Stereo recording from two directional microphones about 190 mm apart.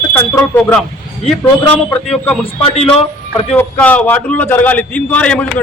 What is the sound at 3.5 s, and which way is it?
A man's voice, 10° left (ahead or behind).